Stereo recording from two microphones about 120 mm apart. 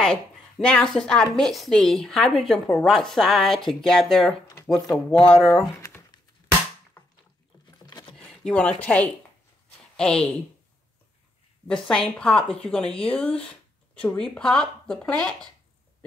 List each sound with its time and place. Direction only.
0.0 s a woman's voice: 5° left (ahead or behind)
5.8 s crumpling: 20° left (ahead or behind)
7.8 s a sound: 40° left (ahead or behind)
8.2 s speech: 10° left (ahead or behind)
11.6 s speech: 5° left (ahead or behind)